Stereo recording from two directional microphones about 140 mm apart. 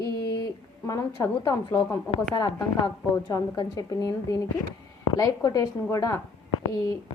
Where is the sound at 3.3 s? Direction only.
30° left (ahead or behind).